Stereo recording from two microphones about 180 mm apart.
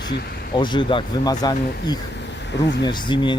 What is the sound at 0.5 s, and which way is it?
Speech, 25° left (ahead or behind).